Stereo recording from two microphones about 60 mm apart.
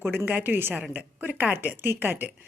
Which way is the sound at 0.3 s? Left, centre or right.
Right.